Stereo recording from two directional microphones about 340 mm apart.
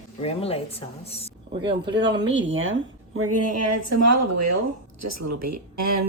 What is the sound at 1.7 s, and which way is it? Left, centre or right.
A woman's voice, right.